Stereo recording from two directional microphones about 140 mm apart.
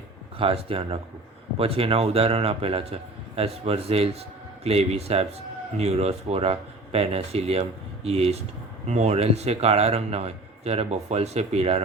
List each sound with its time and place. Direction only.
0.3 s a man's voice: 40° right (ahead or behind)